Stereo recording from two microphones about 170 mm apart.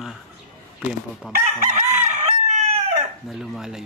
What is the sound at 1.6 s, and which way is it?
Chicken, 40° right (ahead or behind).